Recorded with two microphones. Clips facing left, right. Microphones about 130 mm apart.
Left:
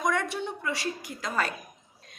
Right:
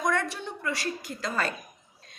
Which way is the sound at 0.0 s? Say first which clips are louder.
Even; 15° left (ahead or behind).